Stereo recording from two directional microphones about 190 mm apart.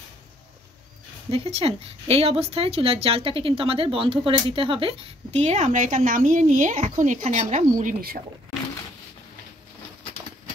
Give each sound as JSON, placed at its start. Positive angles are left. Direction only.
{"t": 1.3, "sound": "a woman's voice", "side_deg": -30}